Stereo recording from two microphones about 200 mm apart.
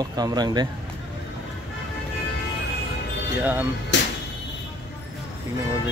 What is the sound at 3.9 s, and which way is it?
Music, 60° left (ahead or behind).